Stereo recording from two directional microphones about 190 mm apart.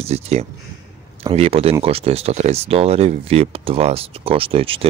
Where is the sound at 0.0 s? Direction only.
35° right (ahead or behind).